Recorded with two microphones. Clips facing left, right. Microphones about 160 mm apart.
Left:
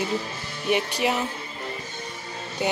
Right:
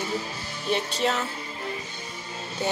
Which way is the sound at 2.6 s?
15° left (ahead or behind).